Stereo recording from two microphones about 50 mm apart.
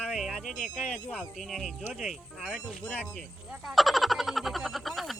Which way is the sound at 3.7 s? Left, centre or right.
Centre.